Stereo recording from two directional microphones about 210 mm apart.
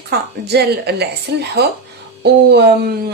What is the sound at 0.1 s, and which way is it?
A woman's voice, 50° right (ahead or behind).